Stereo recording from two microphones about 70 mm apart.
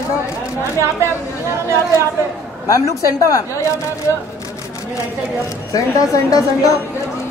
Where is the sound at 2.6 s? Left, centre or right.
Left.